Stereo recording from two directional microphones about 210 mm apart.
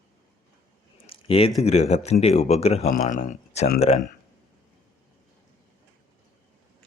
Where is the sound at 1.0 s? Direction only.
25° left (ahead or behind).